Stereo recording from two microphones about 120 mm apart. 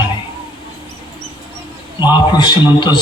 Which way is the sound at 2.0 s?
35° left (ahead or behind).